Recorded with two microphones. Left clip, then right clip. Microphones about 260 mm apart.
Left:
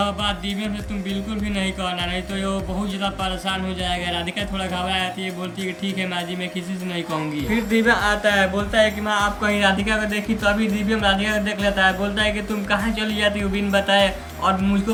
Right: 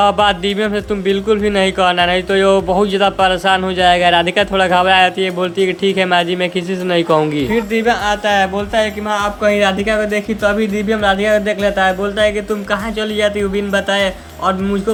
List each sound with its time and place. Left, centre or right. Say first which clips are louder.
0.0 s speech: right 11 dB; centre